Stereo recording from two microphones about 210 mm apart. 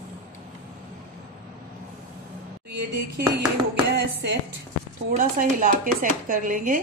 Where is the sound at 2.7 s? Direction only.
50° right (ahead or behind).